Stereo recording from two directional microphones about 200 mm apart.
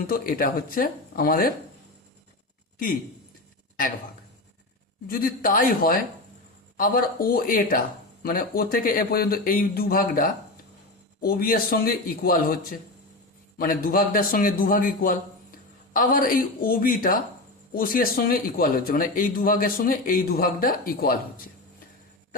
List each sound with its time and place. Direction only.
0.1 s speech: 45° left (ahead or behind)
5.0 s speech: 45° left (ahead or behind)